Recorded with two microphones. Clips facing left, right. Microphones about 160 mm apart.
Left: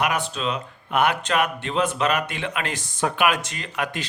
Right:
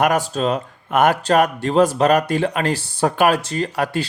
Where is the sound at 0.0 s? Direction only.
45° right (ahead or behind).